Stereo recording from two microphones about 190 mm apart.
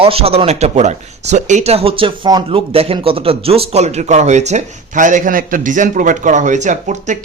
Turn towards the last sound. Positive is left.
turn(degrees=-40)  # may be behind; listen again after turning